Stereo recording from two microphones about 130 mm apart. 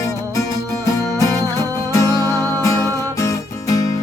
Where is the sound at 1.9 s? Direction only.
25° left (ahead or behind).